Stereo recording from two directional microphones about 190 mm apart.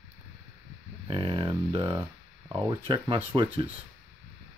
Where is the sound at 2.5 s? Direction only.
25° right (ahead or behind).